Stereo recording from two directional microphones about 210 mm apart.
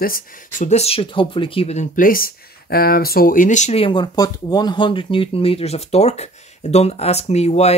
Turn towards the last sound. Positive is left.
turn(degrees=30)  # may be behind; listen again after turning